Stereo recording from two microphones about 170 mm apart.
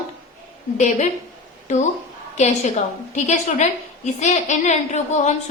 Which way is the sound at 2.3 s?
40° left (ahead or behind).